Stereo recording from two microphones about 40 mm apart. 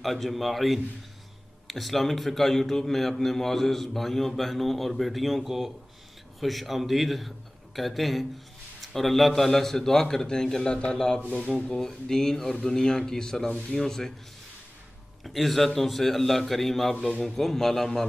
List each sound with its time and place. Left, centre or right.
0.0 s a man's voice: centre; by 11.8 s left
11.8 s a man's voice: centre
15.2 s a man's voice: centre